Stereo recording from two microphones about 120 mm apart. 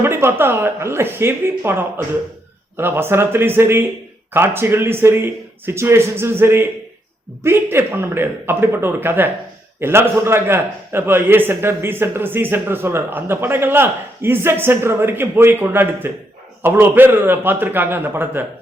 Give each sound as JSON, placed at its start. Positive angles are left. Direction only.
{"t": 0.0, "sound": "a man's voice", "side_deg": -20}